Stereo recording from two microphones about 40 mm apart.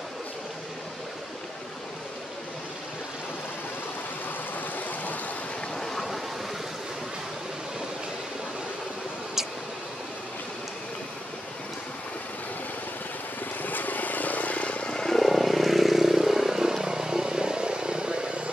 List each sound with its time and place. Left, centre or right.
4.6 s vehicle: left
5.8 s a sound: centre
13.6 s vehicle: left
14.9 s vehicle: centre; by 18.4 s right